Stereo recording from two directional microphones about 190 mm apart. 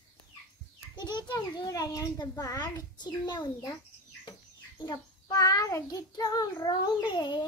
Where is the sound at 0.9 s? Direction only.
25° left (ahead or behind).